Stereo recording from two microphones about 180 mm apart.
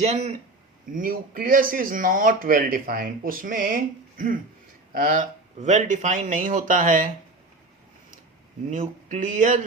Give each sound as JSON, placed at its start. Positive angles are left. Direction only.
{"t": 0.0, "sound": "a man's voice", "side_deg": -35}
{"t": 0.9, "sound": "speech", "side_deg": -50}
{"t": 8.7, "sound": "speech", "side_deg": -45}